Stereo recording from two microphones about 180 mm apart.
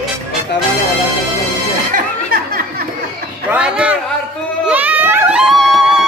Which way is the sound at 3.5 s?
5° right (ahead or behind).